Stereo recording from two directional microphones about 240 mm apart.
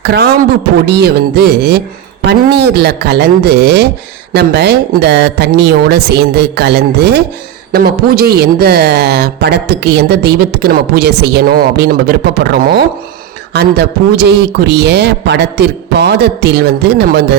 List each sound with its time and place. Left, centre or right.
0.0 s a man's voice: right